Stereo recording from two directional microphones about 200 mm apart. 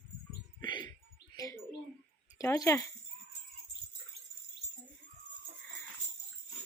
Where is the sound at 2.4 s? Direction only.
15° left (ahead or behind).